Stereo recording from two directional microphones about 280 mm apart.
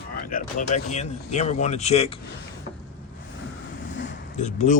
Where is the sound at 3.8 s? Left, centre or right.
Left.